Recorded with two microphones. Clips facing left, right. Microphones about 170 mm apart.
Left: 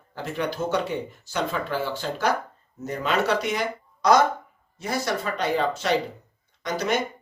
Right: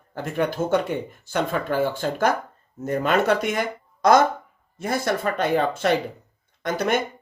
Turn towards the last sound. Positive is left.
turn(degrees=-55)  # may be behind; listen again after turning